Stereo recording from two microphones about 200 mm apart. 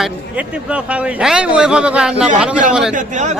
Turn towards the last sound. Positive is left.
turn(degrees=-35)  # may be behind; listen again after turning